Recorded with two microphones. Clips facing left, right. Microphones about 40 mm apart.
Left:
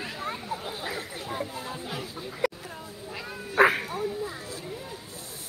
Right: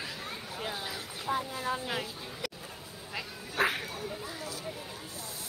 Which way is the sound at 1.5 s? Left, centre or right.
Right.